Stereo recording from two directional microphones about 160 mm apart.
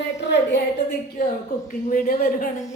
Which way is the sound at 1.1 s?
60° left (ahead or behind).